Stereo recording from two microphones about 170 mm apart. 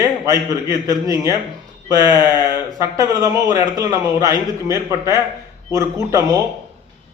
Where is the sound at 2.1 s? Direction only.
25° left (ahead or behind).